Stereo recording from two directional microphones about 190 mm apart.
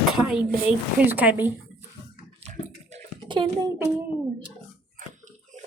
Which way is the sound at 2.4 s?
35° right (ahead or behind).